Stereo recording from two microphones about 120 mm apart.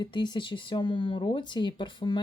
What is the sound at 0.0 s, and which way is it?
Speech, 40° left (ahead or behind).